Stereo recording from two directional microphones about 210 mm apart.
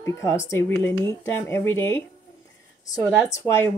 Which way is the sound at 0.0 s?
15° left (ahead or behind).